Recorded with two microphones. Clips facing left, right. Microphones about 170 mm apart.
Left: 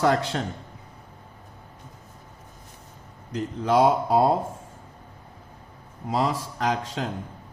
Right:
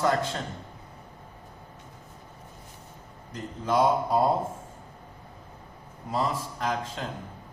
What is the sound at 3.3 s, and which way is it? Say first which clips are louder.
Speech: left 5 dB; 85° left.